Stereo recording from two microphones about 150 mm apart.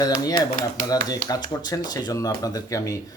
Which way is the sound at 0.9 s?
25° left (ahead or behind).